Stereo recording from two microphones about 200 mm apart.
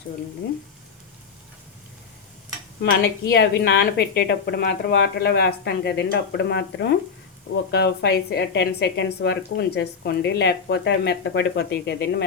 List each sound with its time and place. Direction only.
2.8 s a woman's voice: 50° left (ahead or behind)